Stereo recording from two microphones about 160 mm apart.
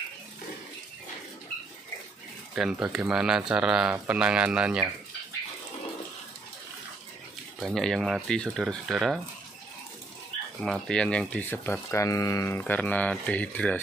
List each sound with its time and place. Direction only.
2.5 s speech: 5° right (ahead or behind)
7.6 s speech: centre (ahead or behind)
10.6 s speech: 5° left (ahead or behind)